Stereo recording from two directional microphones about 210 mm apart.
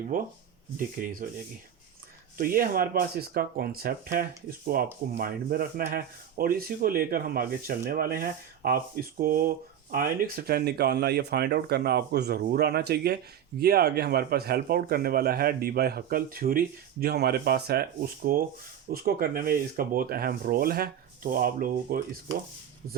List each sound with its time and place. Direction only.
0.1 s speech: 40° right (ahead or behind)
2.4 s a man's voice: 45° right (ahead or behind)